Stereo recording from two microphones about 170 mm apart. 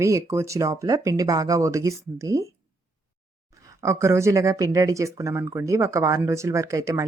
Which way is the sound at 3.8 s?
15° right (ahead or behind).